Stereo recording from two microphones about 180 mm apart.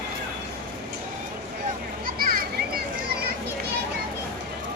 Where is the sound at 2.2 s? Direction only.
55° right (ahead or behind).